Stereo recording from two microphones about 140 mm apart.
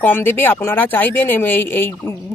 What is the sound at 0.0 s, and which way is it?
Speech, 15° left (ahead or behind).